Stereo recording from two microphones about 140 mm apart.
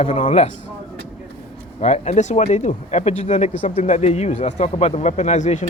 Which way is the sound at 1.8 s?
55° left (ahead or behind).